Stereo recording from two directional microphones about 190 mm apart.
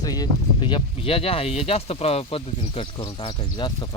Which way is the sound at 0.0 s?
20° left (ahead or behind).